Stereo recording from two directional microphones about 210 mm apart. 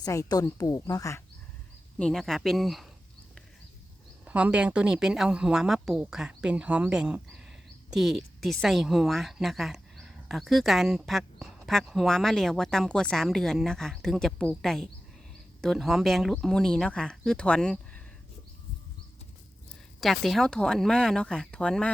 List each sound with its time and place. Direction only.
0.0 s a woman's voice: 15° left (ahead or behind)
2.0 s a woman's voice: 5° left (ahead or behind)
4.3 s a woman's voice: 5° right (ahead or behind)
20.0 s a woman's voice: centre (ahead or behind)